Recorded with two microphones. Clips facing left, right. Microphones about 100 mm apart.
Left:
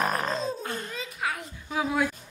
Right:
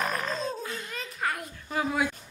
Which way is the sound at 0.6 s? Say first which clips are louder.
Left 3 dB; 50° left (ahead or behind).